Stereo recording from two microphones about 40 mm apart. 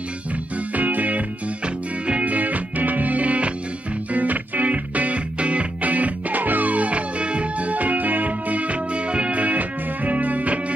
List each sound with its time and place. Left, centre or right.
0.7 s music: right